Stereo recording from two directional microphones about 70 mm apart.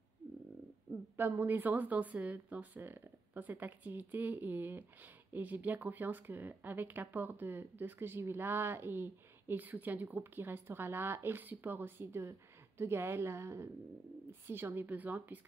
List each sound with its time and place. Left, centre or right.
1.2 s speech: right